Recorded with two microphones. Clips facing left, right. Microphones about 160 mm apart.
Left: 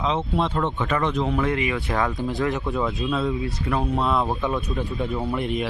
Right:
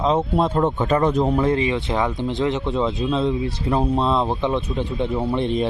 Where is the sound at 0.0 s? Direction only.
40° right (ahead or behind).